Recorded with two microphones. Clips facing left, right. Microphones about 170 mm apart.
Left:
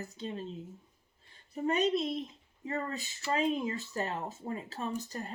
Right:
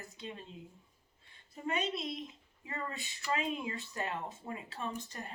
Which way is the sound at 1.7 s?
40° left (ahead or behind).